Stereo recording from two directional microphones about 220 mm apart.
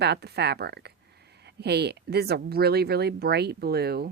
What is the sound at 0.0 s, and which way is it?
Speech, 50° right (ahead or behind).